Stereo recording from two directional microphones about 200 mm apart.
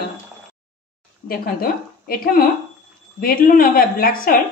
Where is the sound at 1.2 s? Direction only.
50° left (ahead or behind).